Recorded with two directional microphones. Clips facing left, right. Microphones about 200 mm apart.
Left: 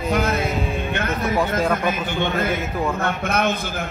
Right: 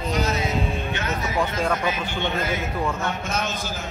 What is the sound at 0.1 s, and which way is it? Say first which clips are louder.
Music: left 4 dB; 55° left (ahead or behind).